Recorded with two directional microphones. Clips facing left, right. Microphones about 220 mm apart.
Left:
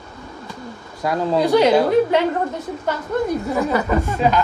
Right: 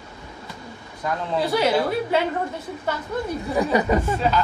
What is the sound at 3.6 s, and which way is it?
Speech, 15° right (ahead or behind).